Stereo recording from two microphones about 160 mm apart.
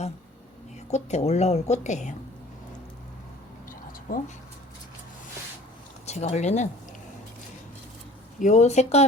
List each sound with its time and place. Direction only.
0.9 s a woman's voice: 45° left (ahead or behind)
4.1 s speech: 65° left (ahead or behind)
6.1 s a woman's voice: 45° left (ahead or behind)
8.4 s a woman's voice: 50° left (ahead or behind)